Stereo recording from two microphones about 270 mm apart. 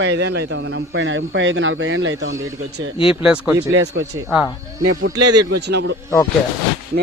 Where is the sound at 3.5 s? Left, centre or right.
Right.